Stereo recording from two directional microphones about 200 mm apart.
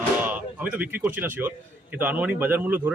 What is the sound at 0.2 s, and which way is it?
A man's voice, 10° right (ahead or behind).